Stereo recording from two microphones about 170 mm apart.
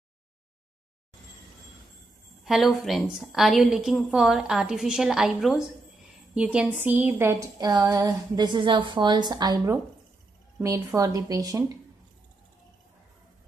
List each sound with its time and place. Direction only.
2.4 s a woman's voice: centre (ahead or behind); by 11.8 s 20° right (ahead or behind)